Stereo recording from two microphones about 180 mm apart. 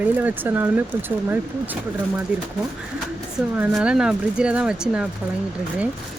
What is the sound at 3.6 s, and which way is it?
Speech, 5° right (ahead or behind).